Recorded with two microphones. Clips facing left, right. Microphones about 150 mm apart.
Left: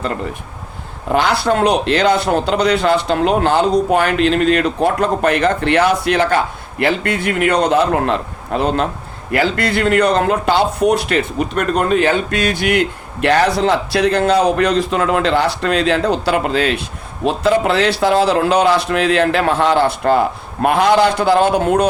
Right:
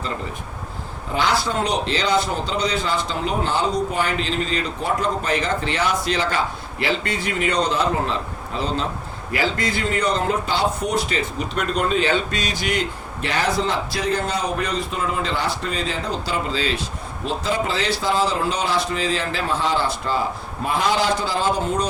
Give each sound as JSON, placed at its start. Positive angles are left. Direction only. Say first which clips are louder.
{"t": 1.1, "sound": "a man's voice", "louder": "left 6 dB", "side_deg": 65}